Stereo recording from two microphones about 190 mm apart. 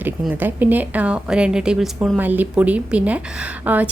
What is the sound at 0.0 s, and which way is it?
Speech, 10° right (ahead or behind).